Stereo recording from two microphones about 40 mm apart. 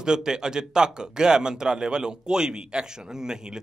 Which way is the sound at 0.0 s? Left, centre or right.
Centre.